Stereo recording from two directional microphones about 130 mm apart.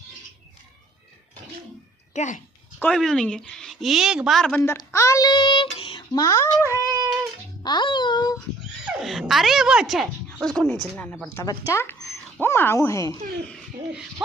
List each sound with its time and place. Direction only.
2.1 s a child's voice: 70° left (ahead or behind)
2.7 s a woman's voice: 5° left (ahead or behind)
4.9 s child singing: 25° left (ahead or behind); by 6.0 s 40° left (ahead or behind)
6.1 s speech: 25° left (ahead or behind)
6.7 s child singing: 25° right (ahead or behind)
7.6 s a sound: 35° left (ahead or behind)
8.8 s a woman's voice: centre (ahead or behind); by 13.1 s 20° left (ahead or behind)